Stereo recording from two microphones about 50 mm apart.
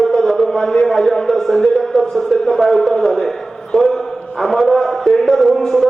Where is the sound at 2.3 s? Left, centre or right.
Centre.